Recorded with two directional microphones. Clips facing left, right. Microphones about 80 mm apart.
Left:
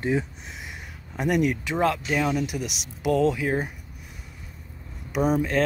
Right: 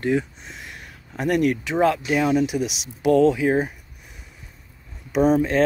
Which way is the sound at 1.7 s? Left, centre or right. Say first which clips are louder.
Right 4 dB; centre.